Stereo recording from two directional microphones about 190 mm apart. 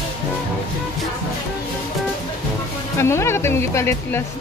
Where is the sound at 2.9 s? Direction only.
15° left (ahead or behind).